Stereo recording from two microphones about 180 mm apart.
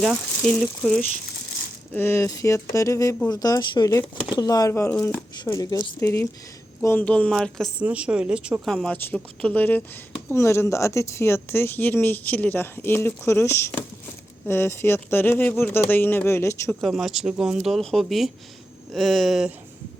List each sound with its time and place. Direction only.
0.0 s speech: centre (ahead or behind); by 16.7 s 15° left (ahead or behind)
16.8 s speech: centre (ahead or behind)